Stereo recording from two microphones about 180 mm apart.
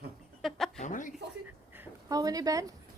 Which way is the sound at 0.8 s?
45° left (ahead or behind).